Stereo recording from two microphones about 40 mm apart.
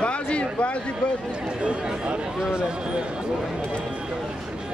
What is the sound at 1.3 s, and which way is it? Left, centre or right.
A man's voice, right.